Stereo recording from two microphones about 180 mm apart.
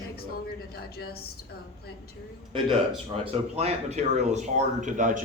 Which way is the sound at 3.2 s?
35° right (ahead or behind).